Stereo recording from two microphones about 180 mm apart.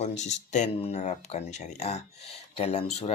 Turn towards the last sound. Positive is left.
turn(degrees=35)  # may be behind; listen again after turning